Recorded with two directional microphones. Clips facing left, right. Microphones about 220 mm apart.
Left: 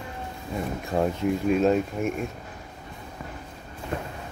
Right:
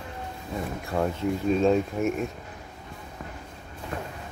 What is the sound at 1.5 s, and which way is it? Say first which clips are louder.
Speech: right 1 dB; 5° left (ahead or behind).